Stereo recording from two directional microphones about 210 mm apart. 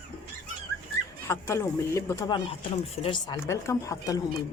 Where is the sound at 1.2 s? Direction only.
15° left (ahead or behind).